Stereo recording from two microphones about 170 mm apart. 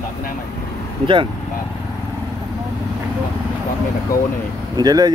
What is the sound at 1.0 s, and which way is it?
Speech, 30° right (ahead or behind).